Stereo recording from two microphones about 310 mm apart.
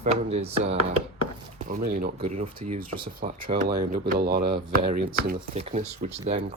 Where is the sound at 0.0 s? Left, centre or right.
Centre.